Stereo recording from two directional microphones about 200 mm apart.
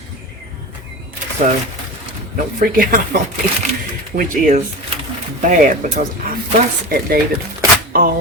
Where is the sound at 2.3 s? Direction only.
45° right (ahead or behind).